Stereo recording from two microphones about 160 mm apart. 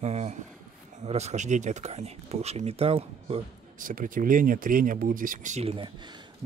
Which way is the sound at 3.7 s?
55° right (ahead or behind).